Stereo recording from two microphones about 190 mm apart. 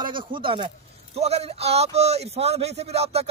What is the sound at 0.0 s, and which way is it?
A man's voice, 25° right (ahead or behind).